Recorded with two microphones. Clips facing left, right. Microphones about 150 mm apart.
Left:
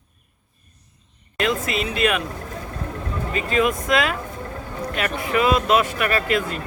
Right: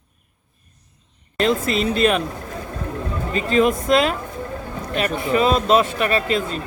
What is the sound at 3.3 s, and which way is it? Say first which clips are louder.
A man's voice: right 4 dB; 30° right (ahead or behind).